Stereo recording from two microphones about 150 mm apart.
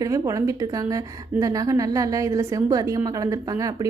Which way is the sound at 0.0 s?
20° right (ahead or behind).